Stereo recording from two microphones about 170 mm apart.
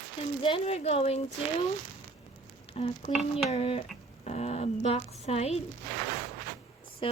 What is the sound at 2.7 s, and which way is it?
Speech, 35° left (ahead or behind).